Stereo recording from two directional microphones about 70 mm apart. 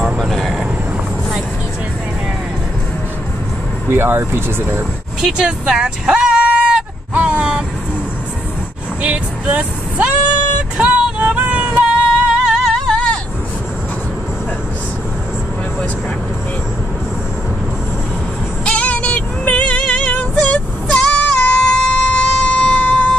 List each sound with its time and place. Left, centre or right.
0.2 s vehicle: centre
3.9 s speech: right
4.7 s speech: centre
7.2 s a sound: centre
9.0 s vehicle: right
10.8 s music: right
12.9 s hubbub: centre
18.7 s music: centre